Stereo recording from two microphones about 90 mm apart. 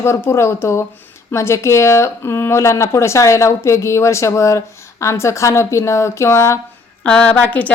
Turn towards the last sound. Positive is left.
turn(degrees=15)  # may be behind; listen again after turning